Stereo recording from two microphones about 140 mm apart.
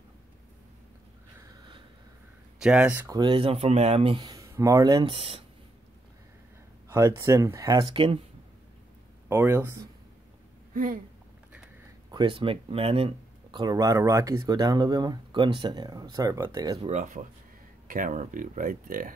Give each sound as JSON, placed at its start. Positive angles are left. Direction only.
{"t": 2.6, "sound": "speech", "side_deg": -5}
{"t": 3.1, "sound": "speech", "side_deg": -35}
{"t": 5.0, "sound": "speech", "side_deg": -40}
{"t": 6.9, "sound": "speech", "side_deg": -20}
{"t": 9.3, "sound": "speech", "side_deg": -15}
{"t": 10.7, "sound": "speech", "side_deg": -85}
{"t": 12.1, "sound": "speech", "side_deg": -35}
{"t": 16.7, "sound": "speech", "side_deg": -55}
{"t": 17.8, "sound": "speech", "side_deg": -75}